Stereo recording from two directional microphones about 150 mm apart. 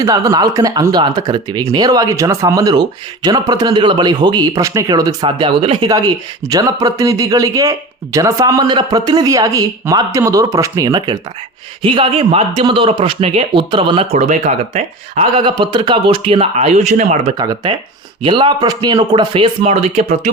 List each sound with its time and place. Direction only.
0.0 s speech: 25° right (ahead or behind)
6.4 s speech: 25° right (ahead or behind); by 17.3 s 50° right (ahead or behind)
17.3 s speech: 25° right (ahead or behind); by 20.3 s 45° right (ahead or behind)